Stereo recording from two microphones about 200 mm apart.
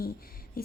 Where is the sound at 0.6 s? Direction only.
45° left (ahead or behind).